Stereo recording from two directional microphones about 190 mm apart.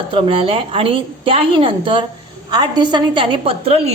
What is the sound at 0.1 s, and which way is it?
A woman's voice, 30° right (ahead or behind).